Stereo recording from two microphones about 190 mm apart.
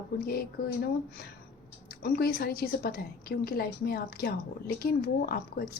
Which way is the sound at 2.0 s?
55° left (ahead or behind).